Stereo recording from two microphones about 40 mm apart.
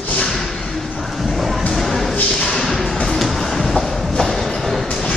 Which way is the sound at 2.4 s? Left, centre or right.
Centre.